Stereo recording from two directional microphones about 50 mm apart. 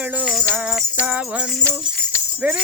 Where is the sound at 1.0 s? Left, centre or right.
Right.